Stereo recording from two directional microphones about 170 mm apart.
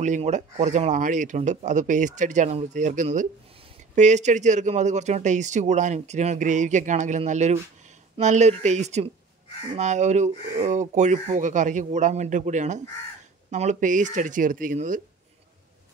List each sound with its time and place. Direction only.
0.0 s speech: 45° right (ahead or behind)